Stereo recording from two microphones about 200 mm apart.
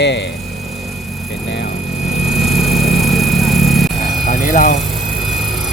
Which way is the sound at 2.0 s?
Centre (ahead or behind).